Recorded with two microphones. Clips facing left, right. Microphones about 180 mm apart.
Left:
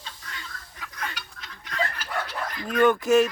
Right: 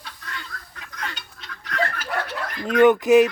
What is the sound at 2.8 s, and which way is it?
Fowl, 15° right (ahead or behind).